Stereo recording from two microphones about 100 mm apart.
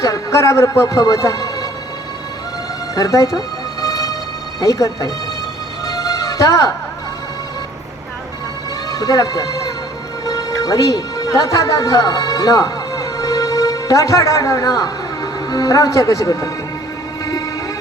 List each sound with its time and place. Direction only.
0.0 s a man's voice: 35° left (ahead or behind)
2.9 s a man's voice: 35° left (ahead or behind)
3.8 s music: 35° left (ahead or behind)
4.6 s a man's voice: 35° left (ahead or behind)
5.8 s music: 35° left (ahead or behind)
8.9 s a man's voice: 35° left (ahead or behind)